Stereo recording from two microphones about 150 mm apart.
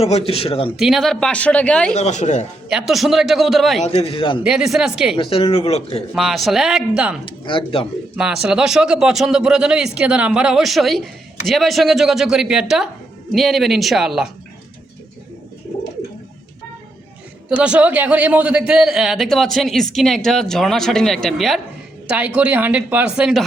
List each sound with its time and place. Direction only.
0.0 s speech: 40° left (ahead or behind)
0.8 s a man's voice: centre (ahead or behind)
1.9 s speech: 50° left (ahead or behind)
2.6 s a man's voice: 5° right (ahead or behind)
3.8 s speech: 40° left (ahead or behind)
4.4 s a man's voice: 5° right (ahead or behind)
5.1 s speech: 35° left (ahead or behind)
6.1 s a man's voice: centre (ahead or behind)
7.3 s speech: 35° left (ahead or behind)
8.1 s a man's voice: 5° right (ahead or behind)
17.6 s a man's voice: 10° right (ahead or behind)